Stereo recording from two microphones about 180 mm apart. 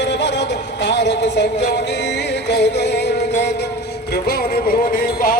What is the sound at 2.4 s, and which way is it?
Music, 70° left (ahead or behind).